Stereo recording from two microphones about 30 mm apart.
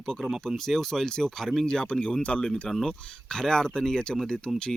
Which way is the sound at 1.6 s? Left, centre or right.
Left.